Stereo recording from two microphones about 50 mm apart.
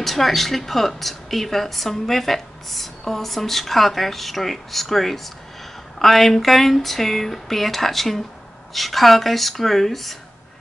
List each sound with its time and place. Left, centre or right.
0.0 s a woman's voice: centre